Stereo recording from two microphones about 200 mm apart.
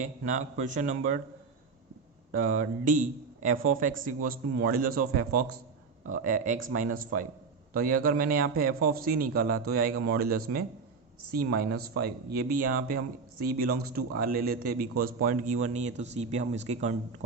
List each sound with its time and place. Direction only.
0.0 s speech: 40° right (ahead or behind)
2.3 s speech: 40° right (ahead or behind)